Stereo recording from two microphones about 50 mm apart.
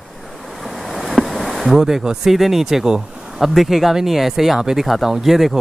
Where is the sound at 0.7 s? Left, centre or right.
Centre.